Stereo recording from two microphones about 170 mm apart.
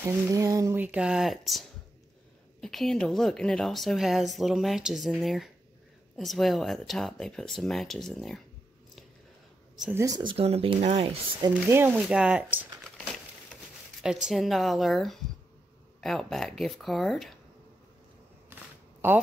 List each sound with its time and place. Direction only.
0.0 s a woman's voice: 20° right (ahead or behind); by 8.4 s centre (ahead or behind)
9.9 s speech: 20° right (ahead or behind)
10.3 s speech: 35° right (ahead or behind)
11.5 s speech: 10° right (ahead or behind)
14.0 s a woman's voice: centre (ahead or behind)
18.5 s a sound: 10° right (ahead or behind)